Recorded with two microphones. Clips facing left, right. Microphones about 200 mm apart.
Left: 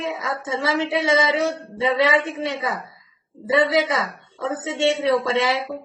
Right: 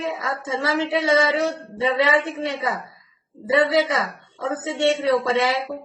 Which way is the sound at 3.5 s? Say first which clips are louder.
Even; 25° left (ahead or behind).